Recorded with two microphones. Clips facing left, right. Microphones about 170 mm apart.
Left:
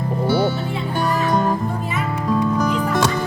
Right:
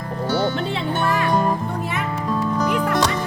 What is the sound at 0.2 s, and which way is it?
Music, 10° left (ahead or behind).